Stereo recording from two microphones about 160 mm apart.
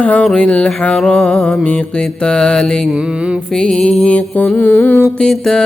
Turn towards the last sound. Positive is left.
turn(degrees=5)  # may be behind; listen again after turning